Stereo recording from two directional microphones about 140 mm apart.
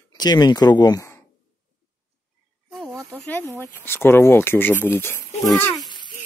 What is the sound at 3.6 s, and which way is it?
Speech, 15° left (ahead or behind).